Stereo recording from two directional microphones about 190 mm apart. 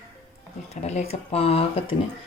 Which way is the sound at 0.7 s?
35° left (ahead or behind).